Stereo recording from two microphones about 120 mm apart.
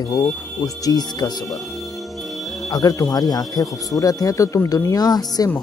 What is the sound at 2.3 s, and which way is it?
Music, centre (ahead or behind).